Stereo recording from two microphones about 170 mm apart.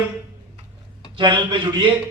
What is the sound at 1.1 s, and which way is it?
Speech, 30° right (ahead or behind).